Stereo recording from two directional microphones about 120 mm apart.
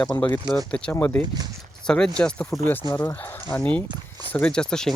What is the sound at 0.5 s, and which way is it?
Speech, 10° left (ahead or behind).